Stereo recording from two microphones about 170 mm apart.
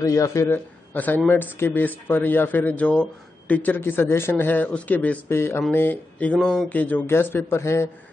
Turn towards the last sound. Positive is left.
turn(degrees=15)  # may be behind; listen again after turning